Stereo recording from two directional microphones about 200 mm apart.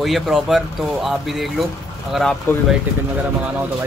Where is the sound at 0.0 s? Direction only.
Centre (ahead or behind).